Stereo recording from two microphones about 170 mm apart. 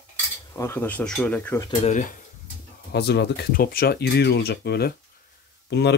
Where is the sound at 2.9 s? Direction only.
75° left (ahead or behind).